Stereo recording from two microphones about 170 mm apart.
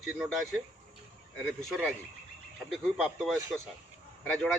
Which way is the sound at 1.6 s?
Centre (ahead or behind).